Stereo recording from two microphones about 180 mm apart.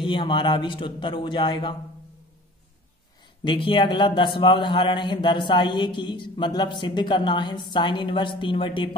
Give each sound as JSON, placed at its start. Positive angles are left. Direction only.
{"t": 0.0, "sound": "a man's voice", "side_deg": 30}
{"t": 3.4, "sound": "a man's voice", "side_deg": 30}